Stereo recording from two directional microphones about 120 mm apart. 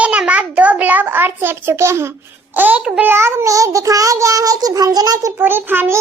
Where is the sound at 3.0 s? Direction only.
20° right (ahead or behind).